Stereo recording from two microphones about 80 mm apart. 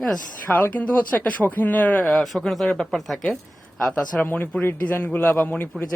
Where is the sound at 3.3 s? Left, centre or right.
Centre.